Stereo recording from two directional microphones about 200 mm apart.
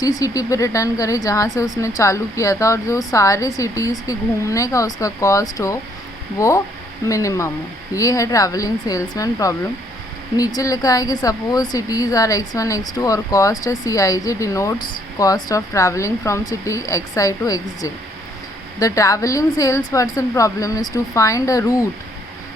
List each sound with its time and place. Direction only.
0.0 s speech: 20° left (ahead or behind)